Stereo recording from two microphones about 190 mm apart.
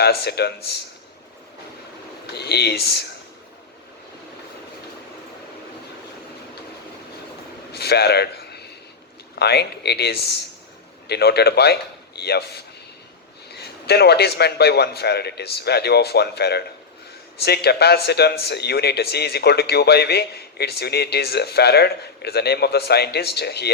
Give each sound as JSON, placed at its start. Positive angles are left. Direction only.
{"t": 0.0, "sound": "a man's voice", "side_deg": 60}
{"t": 2.2, "sound": "speech", "side_deg": 60}
{"t": 7.7, "sound": "a sound", "side_deg": 60}
{"t": 9.4, "sound": "a man's voice", "side_deg": 60}